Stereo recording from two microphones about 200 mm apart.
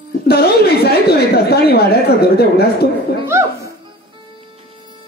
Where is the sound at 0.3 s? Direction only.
50° left (ahead or behind).